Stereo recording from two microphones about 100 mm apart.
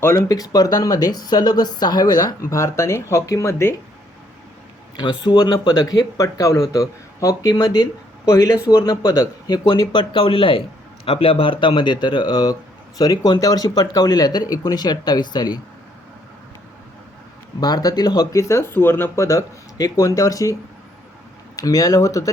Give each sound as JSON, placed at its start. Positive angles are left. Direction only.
{"t": 0.3, "sound": "speech", "side_deg": 40}
{"t": 4.9, "sound": "speech", "side_deg": 50}
{"t": 17.6, "sound": "speech", "side_deg": 40}